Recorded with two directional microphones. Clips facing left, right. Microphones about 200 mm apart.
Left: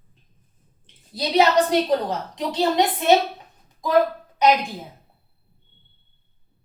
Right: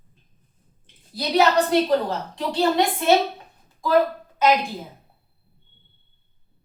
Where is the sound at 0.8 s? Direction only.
25° left (ahead or behind).